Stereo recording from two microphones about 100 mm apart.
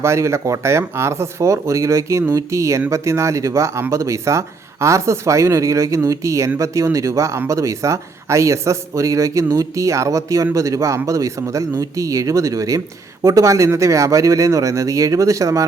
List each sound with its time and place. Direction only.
0.0 s speech: 30° right (ahead or behind)